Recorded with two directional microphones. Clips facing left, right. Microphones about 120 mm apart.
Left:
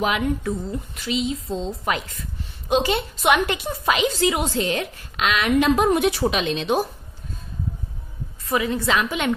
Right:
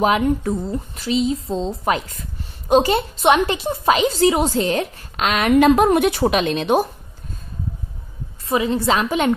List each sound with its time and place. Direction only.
0.0 s a woman's voice: 40° right (ahead or behind)
3.2 s a woman's voice: 30° right (ahead or behind); by 6.8 s 50° right (ahead or behind)
8.5 s a woman's voice: 25° right (ahead or behind)